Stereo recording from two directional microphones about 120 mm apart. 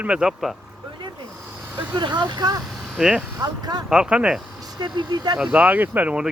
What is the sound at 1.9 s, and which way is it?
Speech, 40° right (ahead or behind).